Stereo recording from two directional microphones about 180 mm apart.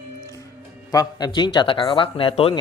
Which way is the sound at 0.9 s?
25° left (ahead or behind).